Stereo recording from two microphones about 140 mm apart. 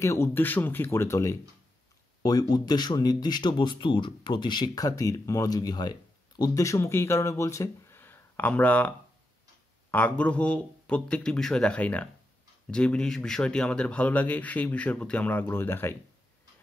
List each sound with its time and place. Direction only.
0.0 s speech: 20° left (ahead or behind)